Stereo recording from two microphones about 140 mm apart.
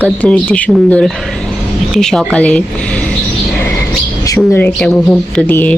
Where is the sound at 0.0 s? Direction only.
10° left (ahead or behind).